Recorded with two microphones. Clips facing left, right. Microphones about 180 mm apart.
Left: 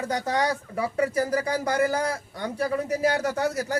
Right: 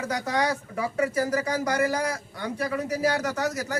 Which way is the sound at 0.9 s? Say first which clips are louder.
Left 1 dB; 30° left (ahead or behind).